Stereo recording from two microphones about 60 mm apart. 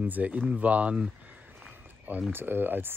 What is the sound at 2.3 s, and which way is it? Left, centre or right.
Speech, right.